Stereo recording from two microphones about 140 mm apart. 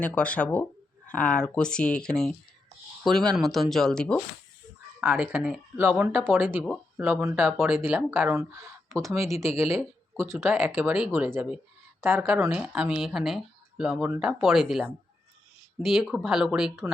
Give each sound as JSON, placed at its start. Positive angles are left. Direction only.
{"t": 0.0, "sound": "speech", "side_deg": 10}
{"t": 5.2, "sound": "speech", "side_deg": -10}